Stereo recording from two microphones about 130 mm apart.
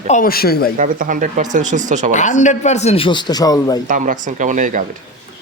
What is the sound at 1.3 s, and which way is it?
Speech, 70° right (ahead or behind).